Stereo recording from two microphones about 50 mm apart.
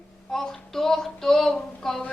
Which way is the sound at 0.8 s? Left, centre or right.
Centre.